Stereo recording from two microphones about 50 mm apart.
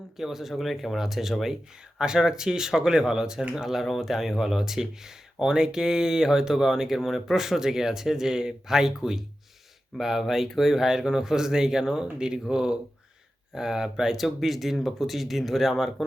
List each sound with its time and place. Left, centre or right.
0.2 s speech: centre
2.0 s speech: centre